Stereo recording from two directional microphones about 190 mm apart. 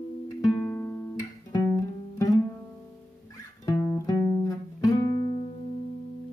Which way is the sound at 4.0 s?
20° left (ahead or behind).